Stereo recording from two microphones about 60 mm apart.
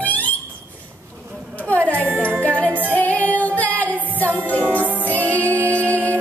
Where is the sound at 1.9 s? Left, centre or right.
Right.